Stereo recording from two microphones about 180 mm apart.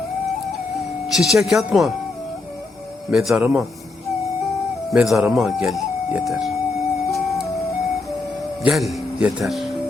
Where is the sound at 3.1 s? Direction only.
Centre (ahead or behind).